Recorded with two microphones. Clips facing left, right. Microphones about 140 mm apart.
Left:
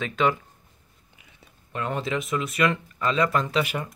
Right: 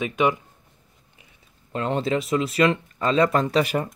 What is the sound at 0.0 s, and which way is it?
Speech, 15° right (ahead or behind).